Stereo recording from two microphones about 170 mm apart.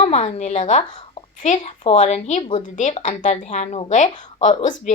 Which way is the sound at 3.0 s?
45° left (ahead or behind).